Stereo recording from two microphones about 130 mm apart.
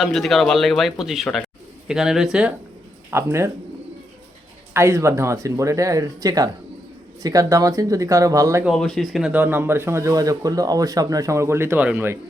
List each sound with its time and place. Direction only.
0.0 s speech: 5° left (ahead or behind)
3.1 s speech: 20° right (ahead or behind)
4.7 s speech: 20° right (ahead or behind)
8.6 s speech: centre (ahead or behind)
9.3 s speech: 15° right (ahead or behind)